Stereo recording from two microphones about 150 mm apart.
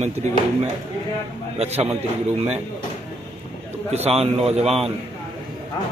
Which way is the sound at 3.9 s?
45° right (ahead or behind).